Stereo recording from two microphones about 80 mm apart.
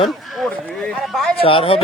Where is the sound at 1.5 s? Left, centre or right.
Left.